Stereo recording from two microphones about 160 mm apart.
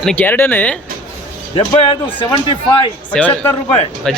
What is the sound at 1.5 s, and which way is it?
Speech, 35° left (ahead or behind).